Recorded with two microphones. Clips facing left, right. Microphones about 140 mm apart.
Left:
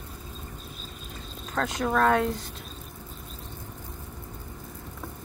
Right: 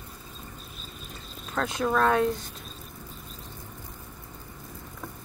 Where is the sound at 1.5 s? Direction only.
45° left (ahead or behind).